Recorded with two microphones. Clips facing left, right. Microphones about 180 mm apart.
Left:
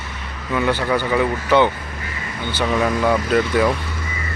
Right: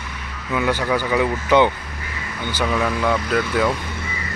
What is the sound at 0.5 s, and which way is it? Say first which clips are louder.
Speech: left 1 dB; 5° right (ahead or behind).